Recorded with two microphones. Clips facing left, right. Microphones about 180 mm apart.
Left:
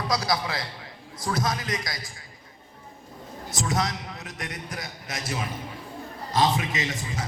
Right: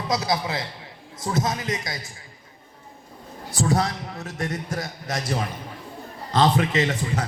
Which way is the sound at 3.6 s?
35° right (ahead or behind).